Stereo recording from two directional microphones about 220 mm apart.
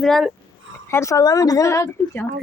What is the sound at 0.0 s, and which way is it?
Speech, centre (ahead or behind).